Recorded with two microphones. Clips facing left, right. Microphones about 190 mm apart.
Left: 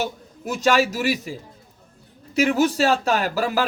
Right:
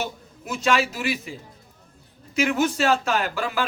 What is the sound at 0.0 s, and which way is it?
A man's voice, 40° left (ahead or behind).